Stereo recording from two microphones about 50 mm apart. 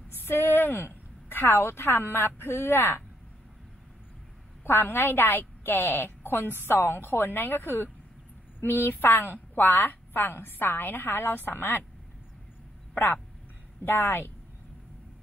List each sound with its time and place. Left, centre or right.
0.2 s a woman's voice: left
4.6 s a woman's voice: left
12.9 s a woman's voice: left